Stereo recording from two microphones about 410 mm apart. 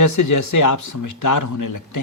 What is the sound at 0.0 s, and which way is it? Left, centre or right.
Speech, left.